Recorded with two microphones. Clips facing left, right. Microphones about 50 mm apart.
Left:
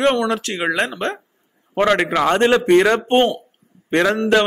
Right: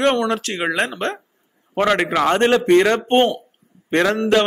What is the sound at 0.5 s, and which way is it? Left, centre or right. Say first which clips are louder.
Speech: left 1 dB; centre.